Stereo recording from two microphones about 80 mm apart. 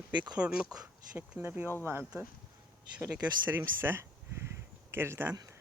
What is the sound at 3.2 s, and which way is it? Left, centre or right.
Speech, right.